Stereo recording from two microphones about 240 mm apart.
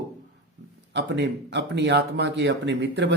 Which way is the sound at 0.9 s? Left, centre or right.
Right.